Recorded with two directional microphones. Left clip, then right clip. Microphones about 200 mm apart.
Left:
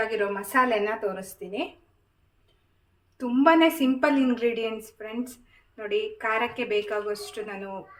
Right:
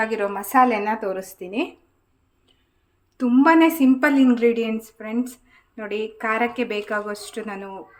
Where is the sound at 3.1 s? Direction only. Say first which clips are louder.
Right 4 dB; 60° right (ahead or behind).